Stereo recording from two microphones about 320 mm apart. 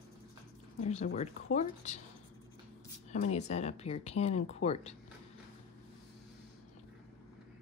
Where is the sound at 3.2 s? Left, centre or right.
Left.